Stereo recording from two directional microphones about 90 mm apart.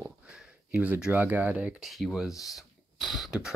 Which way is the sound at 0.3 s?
15° right (ahead or behind).